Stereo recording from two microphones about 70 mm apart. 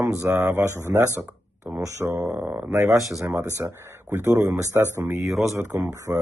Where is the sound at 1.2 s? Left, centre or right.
Right.